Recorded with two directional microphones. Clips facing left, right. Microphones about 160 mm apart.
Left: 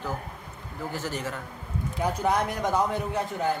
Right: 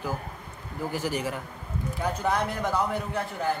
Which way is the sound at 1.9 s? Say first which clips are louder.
Left 2 dB; 20° left (ahead or behind).